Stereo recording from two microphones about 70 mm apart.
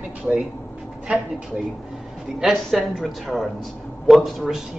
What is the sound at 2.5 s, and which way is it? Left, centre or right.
Speech, centre.